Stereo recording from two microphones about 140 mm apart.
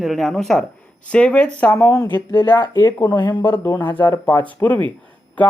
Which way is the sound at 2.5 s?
30° left (ahead or behind).